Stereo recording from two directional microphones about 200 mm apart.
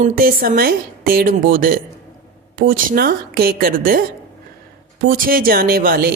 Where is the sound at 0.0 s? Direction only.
45° right (ahead or behind).